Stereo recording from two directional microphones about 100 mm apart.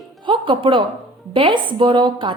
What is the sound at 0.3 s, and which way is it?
A woman's voice, 60° right (ahead or behind).